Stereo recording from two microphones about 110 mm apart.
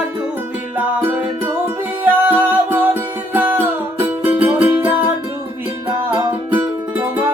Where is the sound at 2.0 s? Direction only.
15° right (ahead or behind).